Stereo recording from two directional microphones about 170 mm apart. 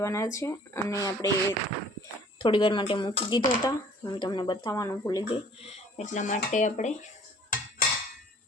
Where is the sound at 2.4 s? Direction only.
30° left (ahead or behind).